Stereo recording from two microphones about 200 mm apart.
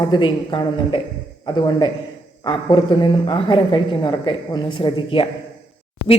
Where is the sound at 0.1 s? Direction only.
25° left (ahead or behind).